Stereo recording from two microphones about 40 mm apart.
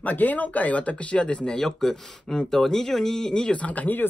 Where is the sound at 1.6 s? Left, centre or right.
Centre.